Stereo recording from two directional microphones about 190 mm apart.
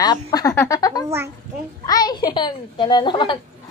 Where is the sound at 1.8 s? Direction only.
20° left (ahead or behind).